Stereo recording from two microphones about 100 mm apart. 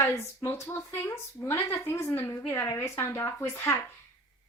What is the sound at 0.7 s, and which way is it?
A woman's voice, 30° left (ahead or behind).